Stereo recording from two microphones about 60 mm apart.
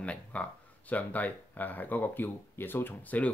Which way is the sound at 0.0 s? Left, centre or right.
Left.